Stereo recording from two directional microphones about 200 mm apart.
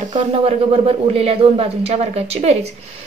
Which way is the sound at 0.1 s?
30° right (ahead or behind).